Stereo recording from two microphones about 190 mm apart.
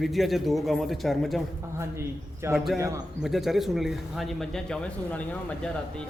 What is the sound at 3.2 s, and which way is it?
Speech, centre (ahead or behind).